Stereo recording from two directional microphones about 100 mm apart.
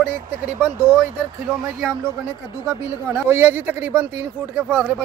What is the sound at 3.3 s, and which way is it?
Speech, 25° right (ahead or behind).